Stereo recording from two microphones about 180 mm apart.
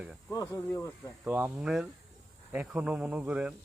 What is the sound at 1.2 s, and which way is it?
Speech, 10° right (ahead or behind).